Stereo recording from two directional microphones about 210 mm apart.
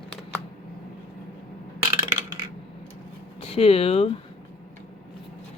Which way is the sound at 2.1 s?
25° right (ahead or behind).